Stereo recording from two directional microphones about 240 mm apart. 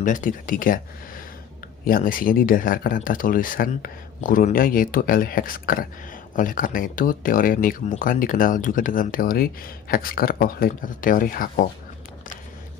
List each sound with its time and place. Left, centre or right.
0.0 s speech: left